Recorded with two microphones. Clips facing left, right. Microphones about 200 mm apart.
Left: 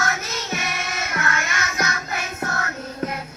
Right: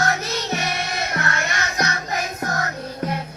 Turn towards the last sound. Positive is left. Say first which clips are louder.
# right 1 dB
turn(degrees=-35)  # may be behind; listen again after turning